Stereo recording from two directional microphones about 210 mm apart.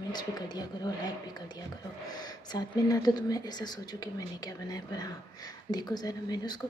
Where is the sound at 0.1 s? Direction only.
20° left (ahead or behind).